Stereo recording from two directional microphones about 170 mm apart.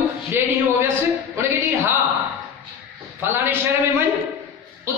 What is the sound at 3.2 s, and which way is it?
Speech, 15° right (ahead or behind).